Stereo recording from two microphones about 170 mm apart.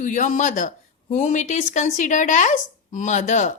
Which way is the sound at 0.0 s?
50° left (ahead or behind).